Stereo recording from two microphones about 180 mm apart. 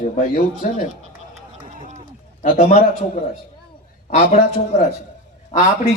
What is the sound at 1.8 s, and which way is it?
Sheep, 45° right (ahead or behind).